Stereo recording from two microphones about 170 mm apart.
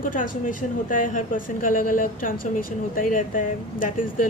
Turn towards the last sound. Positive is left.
turn(degrees=55)  # may be behind; listen again after turning